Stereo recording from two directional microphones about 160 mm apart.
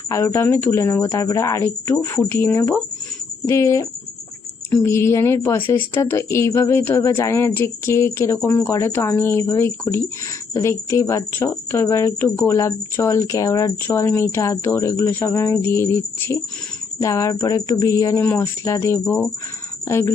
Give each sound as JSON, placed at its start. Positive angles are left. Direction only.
{"t": 0.1, "sound": "a woman's voice", "side_deg": 15}